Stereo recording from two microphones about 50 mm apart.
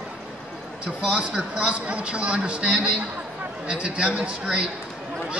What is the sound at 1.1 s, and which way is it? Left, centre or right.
A man's voice, right.